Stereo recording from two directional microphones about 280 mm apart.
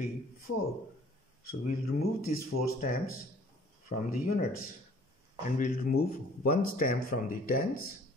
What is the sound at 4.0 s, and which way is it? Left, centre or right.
A man's voice, left.